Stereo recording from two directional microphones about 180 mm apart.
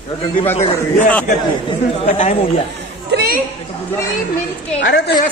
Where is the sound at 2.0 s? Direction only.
35° left (ahead or behind).